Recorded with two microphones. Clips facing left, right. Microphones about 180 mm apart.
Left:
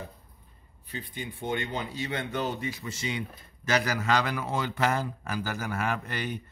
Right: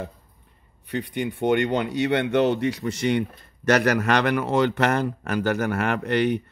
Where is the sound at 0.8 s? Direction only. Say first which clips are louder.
Right 11 dB; 70° right (ahead or behind).